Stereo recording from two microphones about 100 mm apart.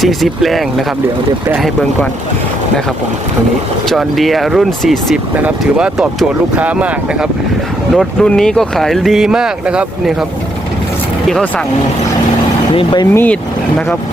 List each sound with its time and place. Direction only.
0.0 s speech: centre (ahead or behind)
3.8 s speech: centre (ahead or behind)
5.4 s speech: 10° right (ahead or behind)
7.9 s speech: 5° left (ahead or behind)
12.7 s speech: 55° left (ahead or behind)
13.1 s speech: 15° left (ahead or behind)